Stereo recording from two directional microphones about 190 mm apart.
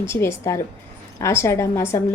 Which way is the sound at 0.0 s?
15° left (ahead or behind).